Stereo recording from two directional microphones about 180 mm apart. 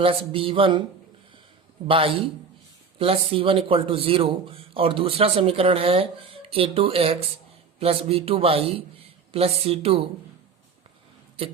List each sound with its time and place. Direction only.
0.0 s speech: 30° right (ahead or behind)
1.9 s speech: 30° right (ahead or behind)